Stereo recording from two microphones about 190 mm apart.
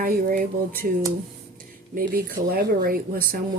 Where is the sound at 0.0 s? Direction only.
50° right (ahead or behind).